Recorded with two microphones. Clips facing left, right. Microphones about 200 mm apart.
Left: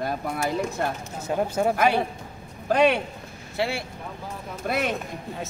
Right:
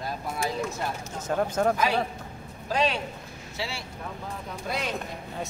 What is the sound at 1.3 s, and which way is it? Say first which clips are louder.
Speech: left 1 dB; 10° left (ahead or behind).